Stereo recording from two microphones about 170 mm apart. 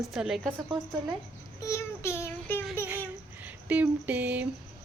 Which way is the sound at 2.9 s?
10° right (ahead or behind).